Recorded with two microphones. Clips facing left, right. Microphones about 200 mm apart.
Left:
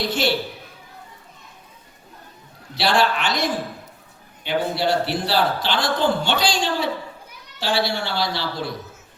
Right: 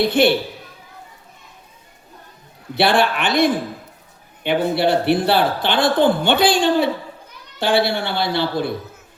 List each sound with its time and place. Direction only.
0.0 s a man's voice: 55° right (ahead or behind)
2.7 s a man's voice: 55° right (ahead or behind)